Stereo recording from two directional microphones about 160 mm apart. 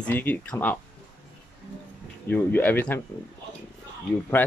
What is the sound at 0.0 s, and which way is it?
Speech, 10° left (ahead or behind).